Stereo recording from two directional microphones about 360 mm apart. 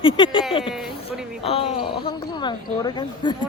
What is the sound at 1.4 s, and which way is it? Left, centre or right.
Speech, centre.